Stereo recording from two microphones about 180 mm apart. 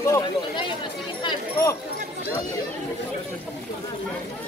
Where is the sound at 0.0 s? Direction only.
15° left (ahead or behind).